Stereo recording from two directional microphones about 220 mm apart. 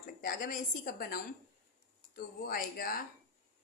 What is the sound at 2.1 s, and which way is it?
Speech, 40° left (ahead or behind).